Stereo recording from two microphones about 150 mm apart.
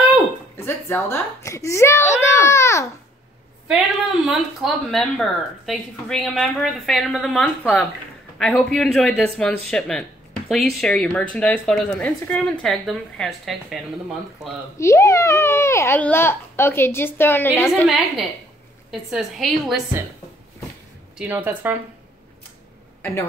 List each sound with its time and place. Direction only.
0.6 s a woman's voice: 15° left (ahead or behind)
3.6 s speech: 5° right (ahead or behind)
14.8 s a child's voice: 20° left (ahead or behind)
17.8 s speech: centre (ahead or behind)
21.2 s speech: 10° right (ahead or behind)